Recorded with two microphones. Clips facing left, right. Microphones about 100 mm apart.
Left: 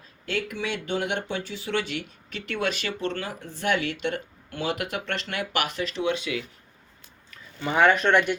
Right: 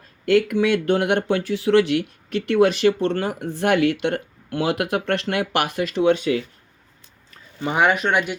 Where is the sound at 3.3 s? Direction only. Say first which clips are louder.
Right 7 dB; 60° right (ahead or behind); by 6.4 s 35° right (ahead or behind).